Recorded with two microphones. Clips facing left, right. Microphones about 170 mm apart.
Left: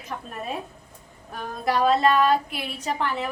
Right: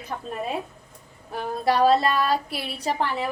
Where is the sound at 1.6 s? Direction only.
35° right (ahead or behind).